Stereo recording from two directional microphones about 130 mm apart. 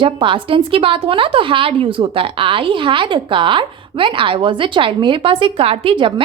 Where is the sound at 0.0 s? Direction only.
40° right (ahead or behind).